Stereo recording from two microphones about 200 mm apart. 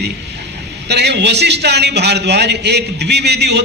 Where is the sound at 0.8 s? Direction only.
55° right (ahead or behind).